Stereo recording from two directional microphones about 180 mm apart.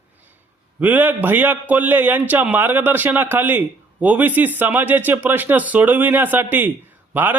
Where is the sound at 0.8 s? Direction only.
10° right (ahead or behind).